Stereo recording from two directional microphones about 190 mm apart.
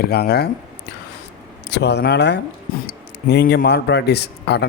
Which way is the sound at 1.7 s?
60° left (ahead or behind).